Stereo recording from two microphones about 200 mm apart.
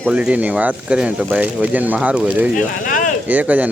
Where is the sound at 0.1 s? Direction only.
5° right (ahead or behind).